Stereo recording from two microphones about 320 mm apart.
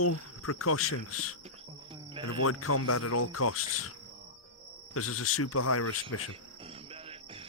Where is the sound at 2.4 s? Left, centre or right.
Left.